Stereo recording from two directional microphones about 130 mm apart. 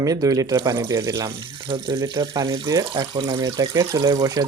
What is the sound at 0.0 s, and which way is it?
Speech, 30° right (ahead or behind).